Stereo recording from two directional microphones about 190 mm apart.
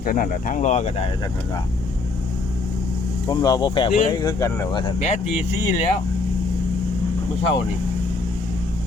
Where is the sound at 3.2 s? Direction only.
20° left (ahead or behind).